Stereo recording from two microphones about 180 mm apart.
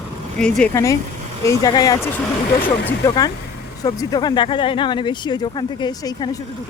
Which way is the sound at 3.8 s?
20° left (ahead or behind).